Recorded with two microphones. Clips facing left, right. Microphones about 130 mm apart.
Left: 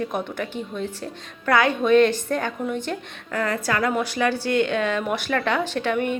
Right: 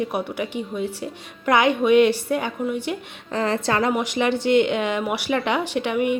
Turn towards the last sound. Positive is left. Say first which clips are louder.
# right 2 dB
turn(degrees=-10)  # may be behind; listen again after turning